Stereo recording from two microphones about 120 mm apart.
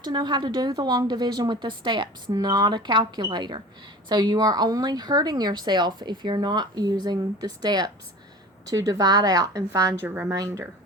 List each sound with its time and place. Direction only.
0.0 s a woman's voice: 40° right (ahead or behind)
10.0 s a woman's voice: 20° right (ahead or behind)